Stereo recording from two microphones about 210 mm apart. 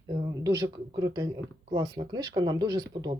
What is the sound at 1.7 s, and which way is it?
Speech, 20° right (ahead or behind).